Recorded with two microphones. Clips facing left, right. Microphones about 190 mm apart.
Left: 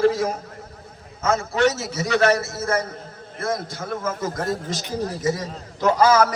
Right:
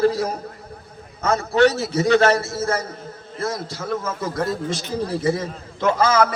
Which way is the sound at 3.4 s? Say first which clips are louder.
Even; 55° left (ahead or behind).